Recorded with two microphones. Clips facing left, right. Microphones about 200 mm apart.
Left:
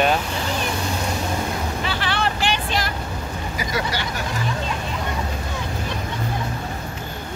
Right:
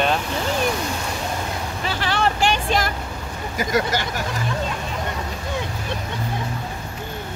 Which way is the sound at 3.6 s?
50° right (ahead or behind).